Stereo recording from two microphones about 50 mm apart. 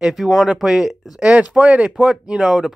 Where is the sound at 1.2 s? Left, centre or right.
Right.